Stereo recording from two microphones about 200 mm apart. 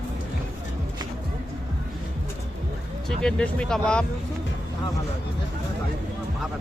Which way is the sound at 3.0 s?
5° left (ahead or behind).